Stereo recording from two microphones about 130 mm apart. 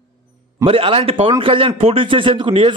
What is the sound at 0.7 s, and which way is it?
A man's voice, 45° right (ahead or behind).